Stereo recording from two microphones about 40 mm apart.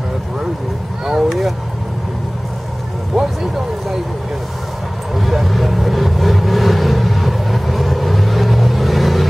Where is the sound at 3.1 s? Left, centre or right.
Centre.